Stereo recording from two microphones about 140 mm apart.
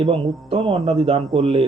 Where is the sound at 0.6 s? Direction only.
30° right (ahead or behind).